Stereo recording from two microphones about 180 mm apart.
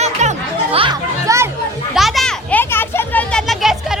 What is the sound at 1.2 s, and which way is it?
Speech, 15° right (ahead or behind).